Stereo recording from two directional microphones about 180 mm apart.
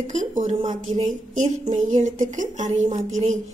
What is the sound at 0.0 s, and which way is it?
A woman's voice, 45° right (ahead or behind).